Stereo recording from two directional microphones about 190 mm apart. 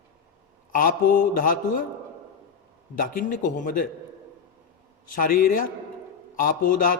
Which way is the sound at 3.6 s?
45° left (ahead or behind).